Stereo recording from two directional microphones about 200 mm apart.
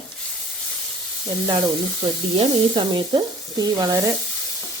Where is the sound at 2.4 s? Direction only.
25° right (ahead or behind).